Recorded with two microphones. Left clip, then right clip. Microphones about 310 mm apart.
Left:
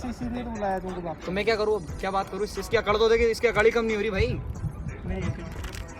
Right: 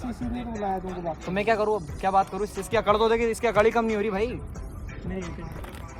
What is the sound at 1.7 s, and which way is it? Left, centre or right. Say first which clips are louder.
Speech: right 4 dB; right.